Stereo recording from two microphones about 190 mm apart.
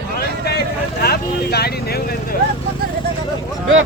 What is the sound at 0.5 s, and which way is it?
Vehicle, 55° left (ahead or behind).